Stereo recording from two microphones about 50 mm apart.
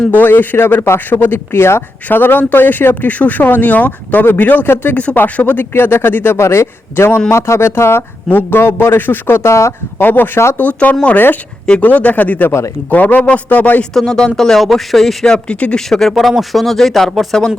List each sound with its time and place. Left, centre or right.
0.1 s a man's voice: left
4.9 s speech: left
5.7 s a man's voice: left
6.4 s a man's voice: left
7.3 s a man's voice: left
10.0 s a man's voice: left
10.6 s speech: left
13.9 s speech: centre
15.3 s speech: centre
15.9 s speech: centre